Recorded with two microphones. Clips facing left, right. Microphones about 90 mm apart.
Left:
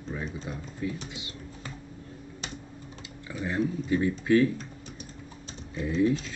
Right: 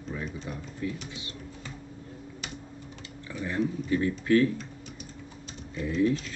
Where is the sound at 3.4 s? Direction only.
20° left (ahead or behind).